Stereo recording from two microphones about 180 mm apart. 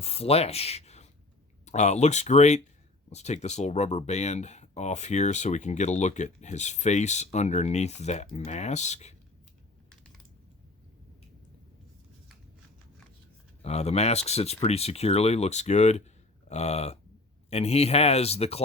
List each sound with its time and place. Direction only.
0.0 s speech: 35° left (ahead or behind)
13.6 s speech: 35° left (ahead or behind)